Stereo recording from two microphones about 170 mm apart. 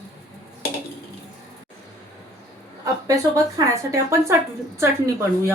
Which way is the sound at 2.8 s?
20° right (ahead or behind).